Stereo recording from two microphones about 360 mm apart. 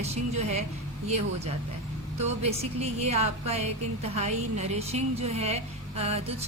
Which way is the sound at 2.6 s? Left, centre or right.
Centre.